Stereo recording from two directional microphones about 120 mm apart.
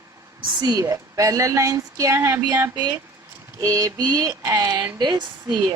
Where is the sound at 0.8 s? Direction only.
30° right (ahead or behind).